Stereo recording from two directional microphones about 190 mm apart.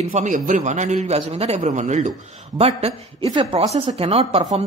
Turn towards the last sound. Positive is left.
turn(degrees=-25)  # may be behind; listen again after turning